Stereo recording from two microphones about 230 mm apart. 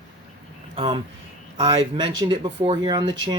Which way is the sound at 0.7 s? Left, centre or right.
Right.